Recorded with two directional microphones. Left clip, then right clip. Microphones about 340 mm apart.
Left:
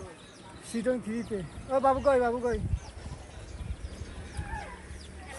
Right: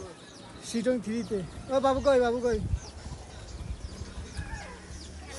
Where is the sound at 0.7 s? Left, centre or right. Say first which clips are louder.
Right 1 dB; left.